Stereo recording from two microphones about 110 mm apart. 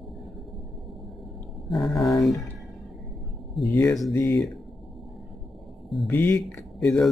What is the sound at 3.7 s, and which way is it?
Speech, 10° left (ahead or behind).